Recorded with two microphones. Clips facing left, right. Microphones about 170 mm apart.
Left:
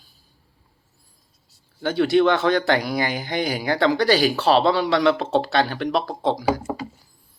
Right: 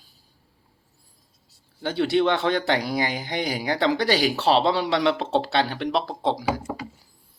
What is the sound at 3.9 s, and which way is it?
Speech, 20° right (ahead or behind).